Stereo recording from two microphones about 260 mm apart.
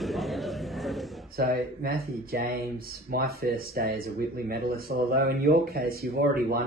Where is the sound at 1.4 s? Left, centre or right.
Right.